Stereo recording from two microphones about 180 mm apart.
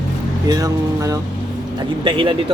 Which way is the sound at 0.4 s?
20° right (ahead or behind).